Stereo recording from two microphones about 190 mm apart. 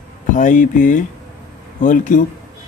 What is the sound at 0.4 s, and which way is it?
Speech, 40° left (ahead or behind).